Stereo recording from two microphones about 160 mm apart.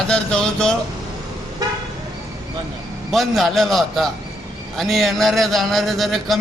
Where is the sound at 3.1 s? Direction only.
Centre (ahead or behind).